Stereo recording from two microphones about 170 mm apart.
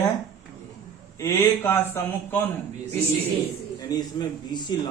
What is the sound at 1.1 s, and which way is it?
A man's voice, 15° left (ahead or behind).